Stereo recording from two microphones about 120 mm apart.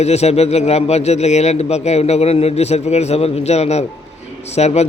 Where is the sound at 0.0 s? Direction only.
65° left (ahead or behind).